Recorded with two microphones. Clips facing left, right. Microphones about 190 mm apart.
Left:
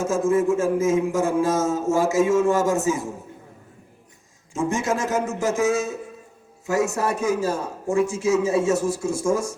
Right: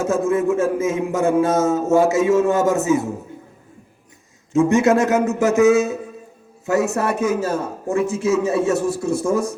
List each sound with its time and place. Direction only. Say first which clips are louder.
0.0 s a man's voice: right 2 dB; 65° right (ahead or behind)
4.5 s a man's voice: right 9 dB; 70° right (ahead or behind)